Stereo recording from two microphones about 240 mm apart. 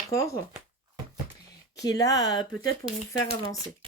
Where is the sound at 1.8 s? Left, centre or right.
Centre.